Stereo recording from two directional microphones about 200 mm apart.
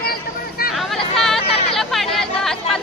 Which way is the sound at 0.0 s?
50° left (ahead or behind).